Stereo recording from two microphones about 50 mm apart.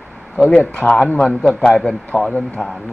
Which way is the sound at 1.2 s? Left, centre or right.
Centre.